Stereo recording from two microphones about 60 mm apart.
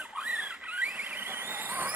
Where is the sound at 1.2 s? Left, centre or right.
Right.